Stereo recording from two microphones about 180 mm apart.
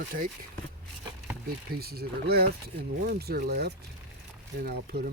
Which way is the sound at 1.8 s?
60° right (ahead or behind).